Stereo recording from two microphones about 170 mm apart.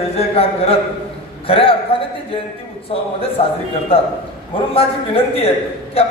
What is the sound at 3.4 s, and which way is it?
A man's voice, 35° left (ahead or behind).